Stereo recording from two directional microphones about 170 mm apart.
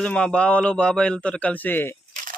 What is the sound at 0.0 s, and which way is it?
A man's voice, 5° left (ahead or behind).